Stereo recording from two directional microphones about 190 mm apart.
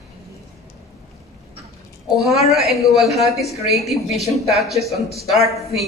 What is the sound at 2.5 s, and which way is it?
Speech, centre (ahead or behind).